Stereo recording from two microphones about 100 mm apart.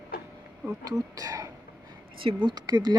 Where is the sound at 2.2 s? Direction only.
50° right (ahead or behind).